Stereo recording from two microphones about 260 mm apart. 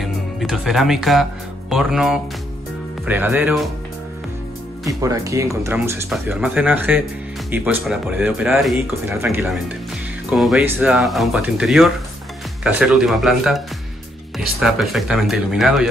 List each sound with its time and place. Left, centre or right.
0.0 s speech: centre
4.8 s speech: centre